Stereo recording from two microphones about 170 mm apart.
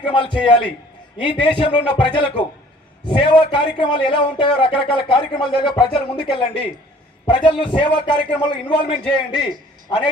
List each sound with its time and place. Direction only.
0.0 s a man's voice: 30° left (ahead or behind)